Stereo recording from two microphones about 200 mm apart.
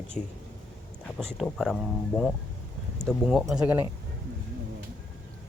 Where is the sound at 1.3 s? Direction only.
Centre (ahead or behind).